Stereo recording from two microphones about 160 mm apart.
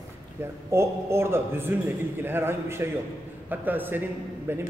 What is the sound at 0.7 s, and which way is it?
A man's voice, 15° right (ahead or behind).